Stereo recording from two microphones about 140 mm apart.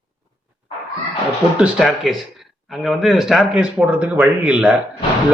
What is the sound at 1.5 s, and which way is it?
Speech, centre (ahead or behind).